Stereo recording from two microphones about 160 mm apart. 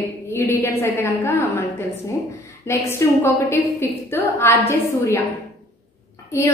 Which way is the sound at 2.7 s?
15° left (ahead or behind).